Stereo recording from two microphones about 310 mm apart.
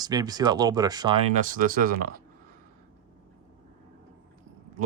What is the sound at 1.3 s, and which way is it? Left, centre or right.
Speech, right.